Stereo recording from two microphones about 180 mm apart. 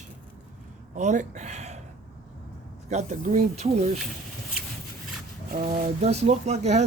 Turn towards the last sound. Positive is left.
turn(degrees=-40)  # may be behind; listen again after turning